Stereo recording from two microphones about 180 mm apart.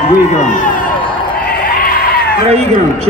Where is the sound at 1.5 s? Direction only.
50° left (ahead or behind).